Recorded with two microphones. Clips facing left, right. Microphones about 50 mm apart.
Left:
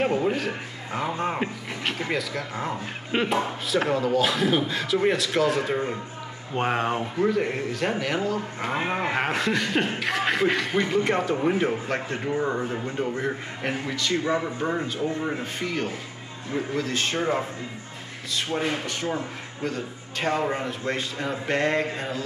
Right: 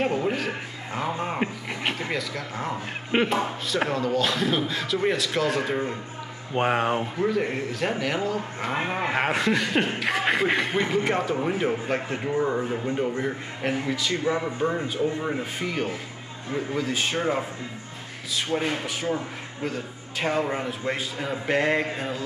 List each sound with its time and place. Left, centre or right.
0.0 s speech: centre
1.7 s speech: centre
2.0 s a man's voice: centre
11.1 s a man's voice: centre
14.2 s a man's voice: centre
14.9 s a man's voice: centre
18.6 s a man's voice: centre